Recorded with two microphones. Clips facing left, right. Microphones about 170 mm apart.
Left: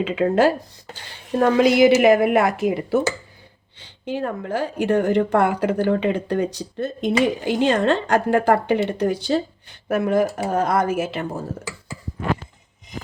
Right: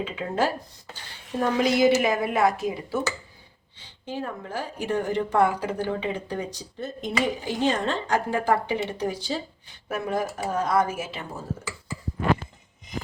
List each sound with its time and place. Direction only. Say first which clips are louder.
0.0 s a woman's voice: left 9 dB; 75° left (ahead or behind)
4.0 s a woman's voice: left 7 dB; 65° left (ahead or behind)